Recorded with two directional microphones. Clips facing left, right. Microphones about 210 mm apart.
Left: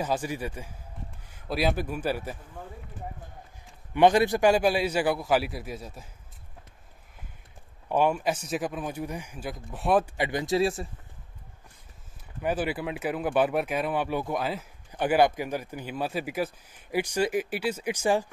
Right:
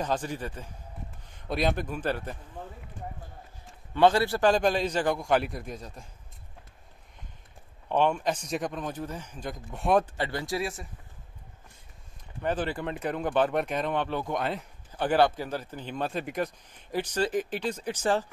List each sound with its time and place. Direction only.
0.0 s speech: 10° left (ahead or behind)
3.9 s speech: 15° left (ahead or behind)
7.9 s speech: 10° left (ahead or behind)
10.1 s speech: 15° left (ahead or behind)
12.4 s speech: 10° left (ahead or behind)